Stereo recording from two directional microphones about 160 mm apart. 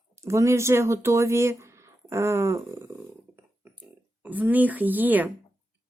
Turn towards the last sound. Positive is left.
turn(degrees=-10)  # may be behind; listen again after turning